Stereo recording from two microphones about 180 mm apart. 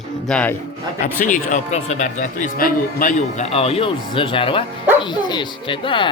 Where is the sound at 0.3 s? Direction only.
5° left (ahead or behind).